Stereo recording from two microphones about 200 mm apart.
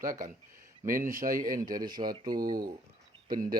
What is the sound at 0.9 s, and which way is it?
Speech, 45° right (ahead or behind).